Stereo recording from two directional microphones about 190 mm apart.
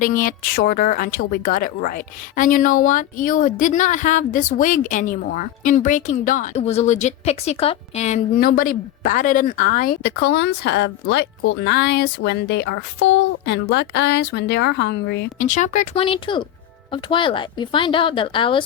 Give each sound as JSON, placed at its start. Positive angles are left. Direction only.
{"t": 0.0, "sound": "speech", "side_deg": 45}
{"t": 8.4, "sound": "speech", "side_deg": 50}
{"t": 10.0, "sound": "speech", "side_deg": 65}
{"t": 15.4, "sound": "a woman's voice", "side_deg": 40}